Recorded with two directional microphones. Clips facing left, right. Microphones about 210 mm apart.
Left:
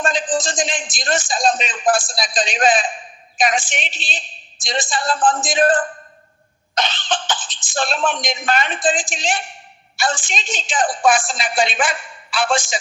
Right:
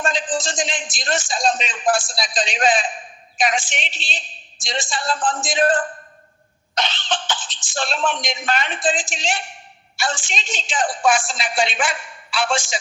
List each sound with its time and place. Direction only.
0.4 s a man's voice: 50° left (ahead or behind)
6.7 s cough: 50° left (ahead or behind)
7.7 s a man's voice: 50° left (ahead or behind)